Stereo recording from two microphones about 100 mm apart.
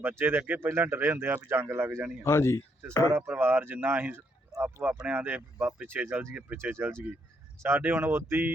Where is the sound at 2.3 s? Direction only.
25° left (ahead or behind).